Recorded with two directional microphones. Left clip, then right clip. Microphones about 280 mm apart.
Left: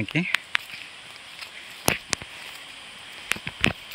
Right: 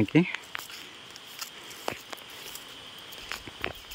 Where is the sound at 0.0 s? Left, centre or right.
Centre.